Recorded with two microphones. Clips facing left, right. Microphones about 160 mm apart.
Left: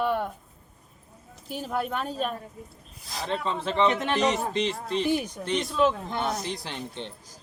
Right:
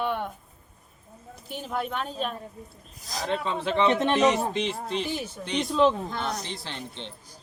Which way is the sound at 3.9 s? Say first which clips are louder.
Right 3 dB; 20° right (ahead or behind).